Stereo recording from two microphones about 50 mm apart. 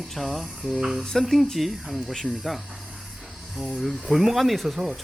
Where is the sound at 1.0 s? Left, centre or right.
Centre.